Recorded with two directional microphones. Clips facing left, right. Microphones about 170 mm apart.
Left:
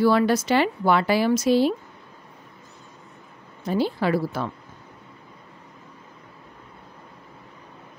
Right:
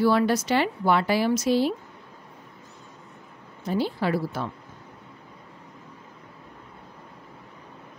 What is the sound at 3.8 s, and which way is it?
Speech, 90° left.